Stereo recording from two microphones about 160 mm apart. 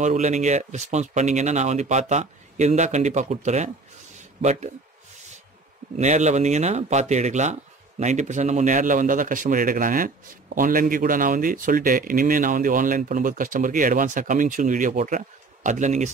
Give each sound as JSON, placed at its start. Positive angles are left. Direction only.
{"t": 0.0, "sound": "a man's voice", "side_deg": -45}
{"t": 5.9, "sound": "a man's voice", "side_deg": -45}